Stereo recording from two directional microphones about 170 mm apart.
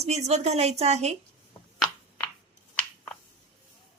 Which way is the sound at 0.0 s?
40° right (ahead or behind).